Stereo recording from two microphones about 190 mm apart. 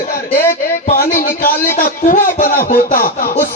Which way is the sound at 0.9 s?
45° left (ahead or behind).